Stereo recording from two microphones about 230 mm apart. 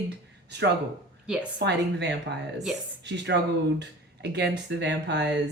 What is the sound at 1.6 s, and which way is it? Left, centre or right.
Speech, right.